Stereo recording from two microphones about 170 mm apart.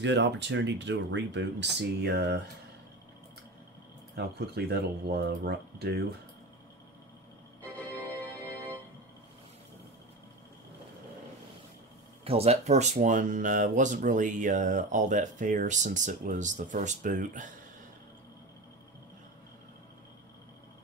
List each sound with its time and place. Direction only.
0.0 s speech: 90° right
4.1 s speech: 70° right (ahead or behind)
12.3 s speech: 35° right (ahead or behind)